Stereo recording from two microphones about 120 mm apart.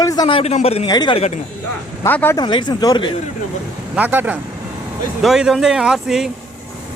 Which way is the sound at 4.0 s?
15° right (ahead or behind).